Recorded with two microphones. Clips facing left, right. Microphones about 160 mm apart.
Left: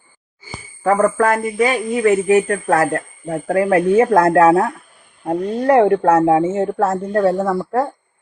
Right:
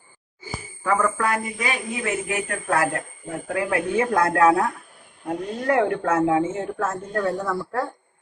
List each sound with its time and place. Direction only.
0.9 s speech: 45° left (ahead or behind)